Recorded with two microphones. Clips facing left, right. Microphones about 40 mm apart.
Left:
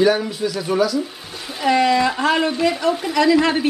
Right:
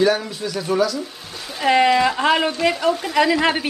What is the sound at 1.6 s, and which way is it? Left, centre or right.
Speech, centre.